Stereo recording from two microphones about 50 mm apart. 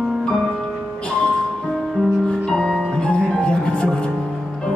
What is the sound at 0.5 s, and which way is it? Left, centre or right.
Music, centre.